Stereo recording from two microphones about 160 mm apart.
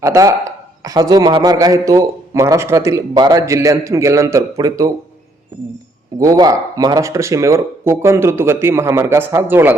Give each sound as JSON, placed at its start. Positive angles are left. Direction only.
{"t": 0.0, "sound": "a man's voice", "side_deg": -20}
{"t": 6.1, "sound": "speech", "side_deg": -25}